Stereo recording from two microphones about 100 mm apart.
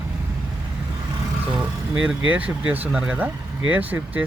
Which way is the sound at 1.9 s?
10° right (ahead or behind).